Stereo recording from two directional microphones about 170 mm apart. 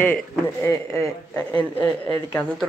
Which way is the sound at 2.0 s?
10° left (ahead or behind).